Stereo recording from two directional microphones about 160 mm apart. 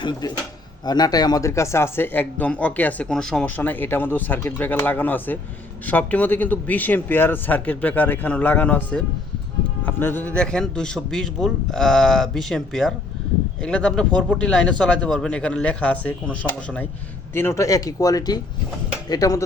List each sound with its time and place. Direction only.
0.0 s a man's voice: 25° left (ahead or behind)